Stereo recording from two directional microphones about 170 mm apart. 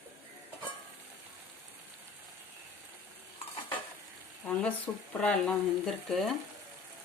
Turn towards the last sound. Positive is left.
turn(degrees=0)  # may be behind; listen again after turning